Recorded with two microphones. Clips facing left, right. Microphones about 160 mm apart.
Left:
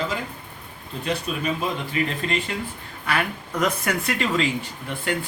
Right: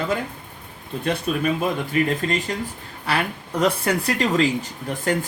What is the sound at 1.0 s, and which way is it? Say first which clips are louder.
Speech: right 4 dB; 55° right (ahead or behind).